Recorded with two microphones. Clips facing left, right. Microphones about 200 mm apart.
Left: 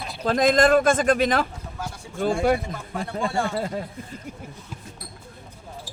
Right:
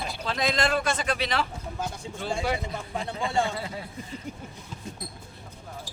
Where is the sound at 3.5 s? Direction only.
45° left (ahead or behind).